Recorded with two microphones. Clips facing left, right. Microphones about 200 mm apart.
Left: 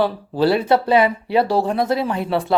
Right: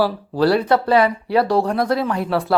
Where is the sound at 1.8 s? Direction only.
25° left (ahead or behind).